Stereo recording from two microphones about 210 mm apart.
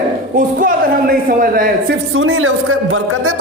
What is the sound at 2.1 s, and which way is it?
Speech, 70° right (ahead or behind).